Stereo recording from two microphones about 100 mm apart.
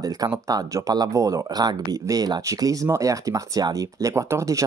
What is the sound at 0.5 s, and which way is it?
Speech, 35° right (ahead or behind).